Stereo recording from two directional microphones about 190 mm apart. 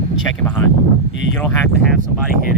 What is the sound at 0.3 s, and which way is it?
Speech, 10° left (ahead or behind).